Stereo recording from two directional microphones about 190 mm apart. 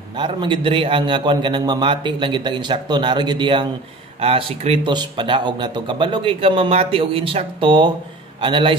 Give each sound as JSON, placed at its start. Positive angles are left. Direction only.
{"t": 0.1, "sound": "speech", "side_deg": -25}